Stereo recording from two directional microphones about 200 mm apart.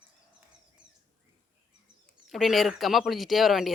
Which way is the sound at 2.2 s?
Centre (ahead or behind).